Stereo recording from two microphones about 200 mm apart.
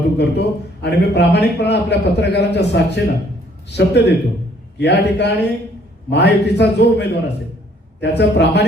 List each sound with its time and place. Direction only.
0.2 s a man's voice: 55° left (ahead or behind)